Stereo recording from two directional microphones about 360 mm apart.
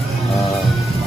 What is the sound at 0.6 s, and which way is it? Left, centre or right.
Music, centre.